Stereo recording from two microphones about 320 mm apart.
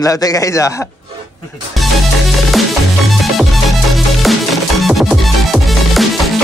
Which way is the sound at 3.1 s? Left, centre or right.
Centre.